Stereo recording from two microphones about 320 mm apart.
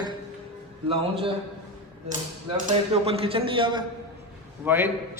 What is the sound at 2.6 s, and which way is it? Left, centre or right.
A man's voice, centre.